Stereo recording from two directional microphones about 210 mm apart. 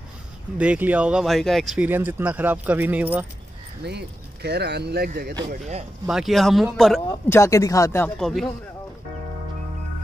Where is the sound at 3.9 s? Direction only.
50° right (ahead or behind).